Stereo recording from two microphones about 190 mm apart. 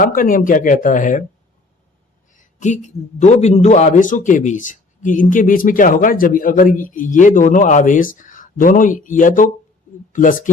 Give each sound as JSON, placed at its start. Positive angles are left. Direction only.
{"t": 0.0, "sound": "a man's voice", "side_deg": 45}
{"t": 2.3, "sound": "a man's voice", "side_deg": 40}